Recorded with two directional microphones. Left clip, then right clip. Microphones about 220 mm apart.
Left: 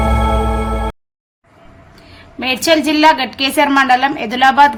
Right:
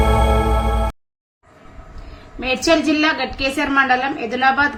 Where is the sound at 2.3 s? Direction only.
40° left (ahead or behind).